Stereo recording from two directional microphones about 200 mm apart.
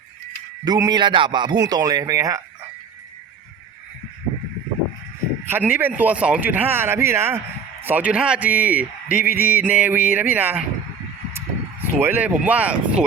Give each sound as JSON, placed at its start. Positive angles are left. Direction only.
{"t": 0.6, "sound": "a man's voice", "side_deg": -20}
{"t": 5.5, "sound": "speech", "side_deg": -10}